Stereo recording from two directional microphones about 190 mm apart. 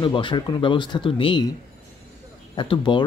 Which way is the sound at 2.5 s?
25° left (ahead or behind).